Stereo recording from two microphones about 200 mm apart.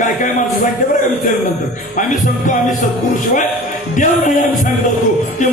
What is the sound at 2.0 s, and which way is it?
Speech, 40° left (ahead or behind).